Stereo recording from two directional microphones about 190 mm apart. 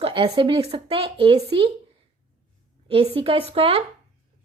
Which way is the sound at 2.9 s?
30° right (ahead or behind).